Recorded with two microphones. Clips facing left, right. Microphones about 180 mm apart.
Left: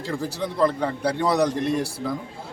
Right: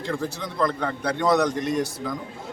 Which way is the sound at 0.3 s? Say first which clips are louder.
Left 8 dB; 35° left (ahead or behind).